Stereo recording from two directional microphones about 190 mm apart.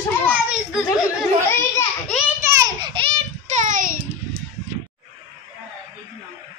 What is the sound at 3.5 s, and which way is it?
Child singing, 40° right (ahead or behind).